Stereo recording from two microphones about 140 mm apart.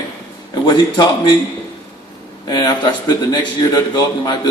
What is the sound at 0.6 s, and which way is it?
Speech, 30° left (ahead or behind).